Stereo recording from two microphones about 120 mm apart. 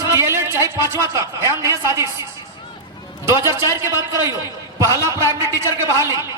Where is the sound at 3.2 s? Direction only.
25° right (ahead or behind).